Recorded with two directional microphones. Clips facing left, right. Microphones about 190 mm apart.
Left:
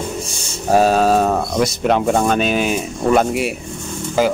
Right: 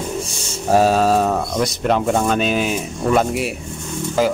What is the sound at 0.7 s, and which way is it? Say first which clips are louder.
Speech: left 1 dB; centre (ahead or behind).